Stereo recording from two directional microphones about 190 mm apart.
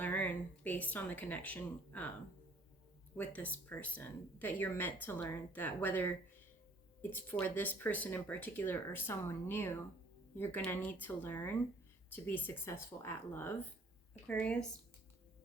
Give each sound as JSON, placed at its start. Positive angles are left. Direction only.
{"t": 0.0, "sound": "speech", "side_deg": 10}
{"t": 3.2, "sound": "speech", "side_deg": 10}